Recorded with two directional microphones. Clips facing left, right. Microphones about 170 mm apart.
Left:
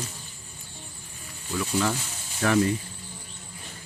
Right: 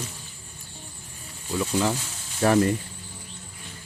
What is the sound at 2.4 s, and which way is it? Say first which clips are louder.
Speech: right 2 dB; 40° right (ahead or behind).